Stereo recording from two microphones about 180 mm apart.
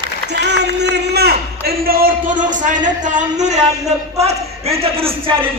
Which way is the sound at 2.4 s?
45° right (ahead or behind).